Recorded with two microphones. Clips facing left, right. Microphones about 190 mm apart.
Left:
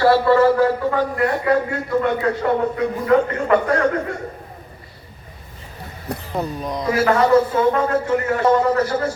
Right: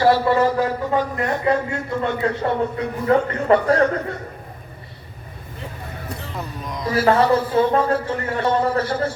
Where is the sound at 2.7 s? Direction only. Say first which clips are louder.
Left 2 dB; 30° right (ahead or behind).